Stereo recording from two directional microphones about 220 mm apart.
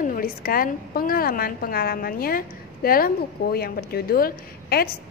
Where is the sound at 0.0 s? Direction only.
40° left (ahead or behind).